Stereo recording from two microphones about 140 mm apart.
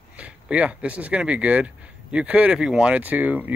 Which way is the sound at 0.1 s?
10° right (ahead or behind).